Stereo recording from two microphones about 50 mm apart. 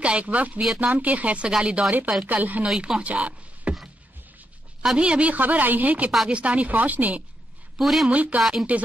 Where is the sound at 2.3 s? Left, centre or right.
Right.